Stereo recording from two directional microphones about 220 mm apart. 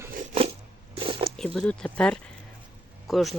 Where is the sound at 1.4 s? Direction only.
5° left (ahead or behind).